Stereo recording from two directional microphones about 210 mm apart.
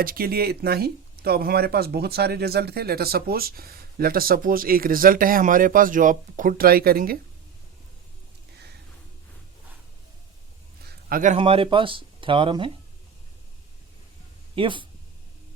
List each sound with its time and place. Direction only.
0.0 s speech: 45° right (ahead or behind)
10.8 s a sound: 40° right (ahead or behind)
11.3 s speech: 25° right (ahead or behind)
14.5 s speech: 25° right (ahead or behind)